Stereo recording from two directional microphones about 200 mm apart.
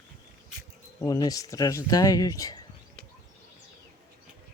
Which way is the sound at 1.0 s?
20° left (ahead or behind).